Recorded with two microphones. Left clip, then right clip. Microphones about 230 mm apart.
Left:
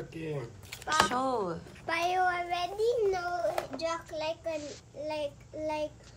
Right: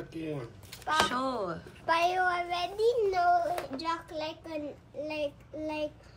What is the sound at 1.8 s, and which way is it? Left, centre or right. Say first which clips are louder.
A child's voice: right 2 dB; centre.